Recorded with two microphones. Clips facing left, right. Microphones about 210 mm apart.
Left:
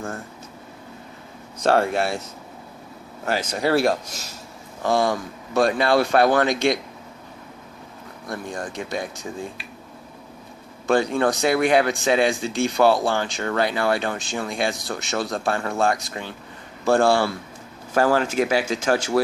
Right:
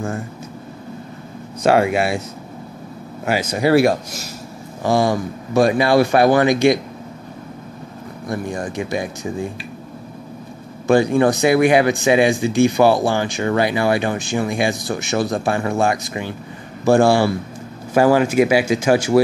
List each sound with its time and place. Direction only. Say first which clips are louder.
1.6 s speech: right 4 dB; 10° right (ahead or behind)
3.3 s speech: right 5 dB; 10° right (ahead or behind)
8.3 s speech: right 6 dB; 10° right (ahead or behind)
10.9 s speech: right 6 dB; 10° right (ahead or behind)